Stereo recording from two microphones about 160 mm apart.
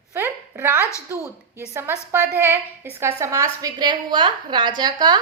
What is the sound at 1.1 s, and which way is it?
A woman's voice, 20° right (ahead or behind).